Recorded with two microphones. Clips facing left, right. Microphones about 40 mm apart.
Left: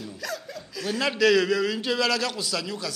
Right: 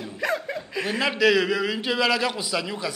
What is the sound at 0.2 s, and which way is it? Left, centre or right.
Chuckle, right.